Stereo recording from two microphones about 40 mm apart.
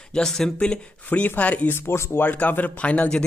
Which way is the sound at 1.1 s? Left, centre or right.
Left.